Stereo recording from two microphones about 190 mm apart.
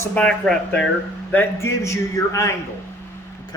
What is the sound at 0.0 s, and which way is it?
A man's voice, 5° left (ahead or behind).